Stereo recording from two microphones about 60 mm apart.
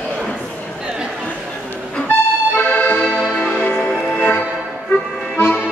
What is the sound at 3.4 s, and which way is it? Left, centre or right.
Music, left.